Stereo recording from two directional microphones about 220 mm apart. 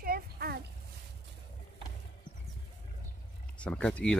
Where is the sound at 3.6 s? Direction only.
5° left (ahead or behind).